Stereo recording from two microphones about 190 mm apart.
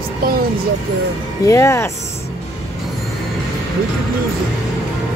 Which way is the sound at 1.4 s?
15° left (ahead or behind).